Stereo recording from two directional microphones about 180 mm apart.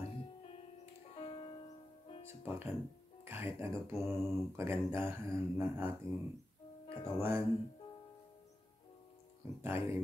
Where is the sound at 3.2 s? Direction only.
15° right (ahead or behind).